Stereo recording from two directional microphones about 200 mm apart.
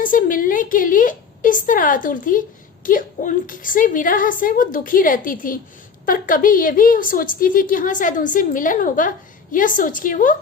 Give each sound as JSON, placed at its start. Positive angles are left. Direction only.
{"t": 0.0, "sound": "a woman's voice", "side_deg": 45}